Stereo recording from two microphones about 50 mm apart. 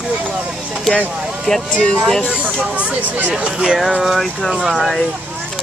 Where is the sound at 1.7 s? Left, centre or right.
Left.